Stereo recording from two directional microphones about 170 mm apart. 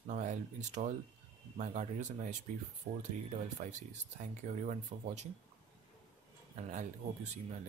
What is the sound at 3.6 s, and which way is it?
Speech, 45° right (ahead or behind).